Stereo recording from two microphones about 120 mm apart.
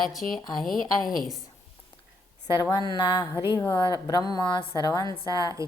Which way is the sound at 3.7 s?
40° left (ahead or behind).